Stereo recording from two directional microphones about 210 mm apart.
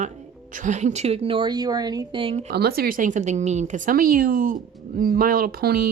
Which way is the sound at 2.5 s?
50° right (ahead or behind).